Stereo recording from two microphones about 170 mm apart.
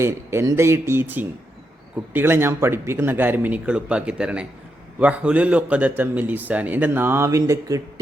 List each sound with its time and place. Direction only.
0.0 s a man's voice: 15° right (ahead or behind)